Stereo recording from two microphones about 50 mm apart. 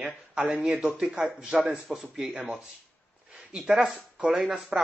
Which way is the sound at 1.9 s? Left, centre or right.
Centre.